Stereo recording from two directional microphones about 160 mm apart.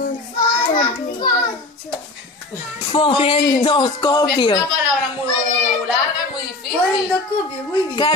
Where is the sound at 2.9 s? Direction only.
35° left (ahead or behind).